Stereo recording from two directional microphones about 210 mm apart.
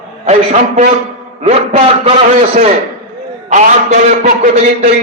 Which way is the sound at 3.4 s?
35° right (ahead or behind).